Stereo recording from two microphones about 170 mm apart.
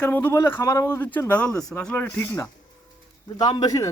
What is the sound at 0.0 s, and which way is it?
Speech, 10° left (ahead or behind).